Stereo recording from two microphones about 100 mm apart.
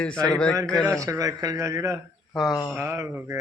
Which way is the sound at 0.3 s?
10° left (ahead or behind).